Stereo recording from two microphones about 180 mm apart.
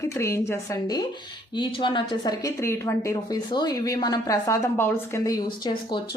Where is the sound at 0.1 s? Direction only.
15° left (ahead or behind).